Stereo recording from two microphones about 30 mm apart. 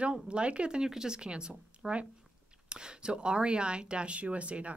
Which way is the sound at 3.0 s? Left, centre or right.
Right.